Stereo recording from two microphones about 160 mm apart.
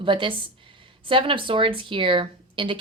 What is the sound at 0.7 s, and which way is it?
Speech, 35° right (ahead or behind).